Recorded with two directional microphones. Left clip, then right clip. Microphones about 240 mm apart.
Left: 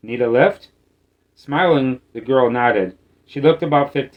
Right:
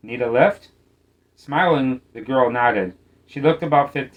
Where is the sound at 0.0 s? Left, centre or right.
Left.